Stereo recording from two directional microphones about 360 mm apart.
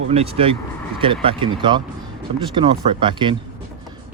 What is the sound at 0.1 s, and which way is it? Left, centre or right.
Speech, centre.